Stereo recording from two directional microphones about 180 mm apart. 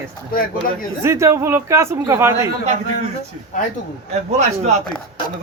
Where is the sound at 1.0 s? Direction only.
15° right (ahead or behind).